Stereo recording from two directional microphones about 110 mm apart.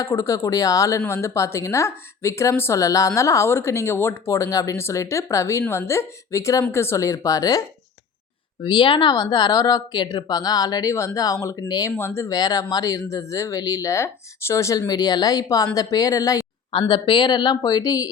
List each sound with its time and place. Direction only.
0.0 s speech: 30° left (ahead or behind)
8.6 s speech: 50° left (ahead or behind); by 12.4 s 25° left (ahead or behind)
12.4 s speech: 35° left (ahead or behind)
16.8 s speech: 45° left (ahead or behind)